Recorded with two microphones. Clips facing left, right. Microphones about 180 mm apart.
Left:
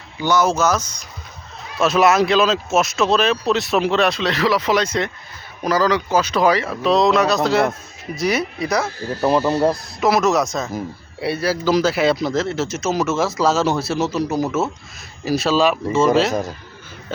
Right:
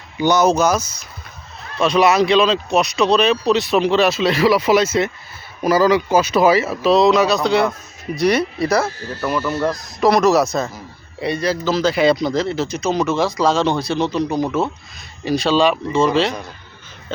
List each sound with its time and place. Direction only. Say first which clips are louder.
0.2 s speech: right 3 dB; 20° right (ahead or behind); by 8.9 s centre (ahead or behind)
9.0 s speech: left 4 dB; 10° left (ahead or behind)
16.3 s a man's voice: left 8 dB; 45° left (ahead or behind)